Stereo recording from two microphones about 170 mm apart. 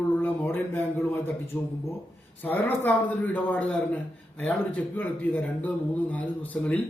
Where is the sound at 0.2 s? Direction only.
10° left (ahead or behind).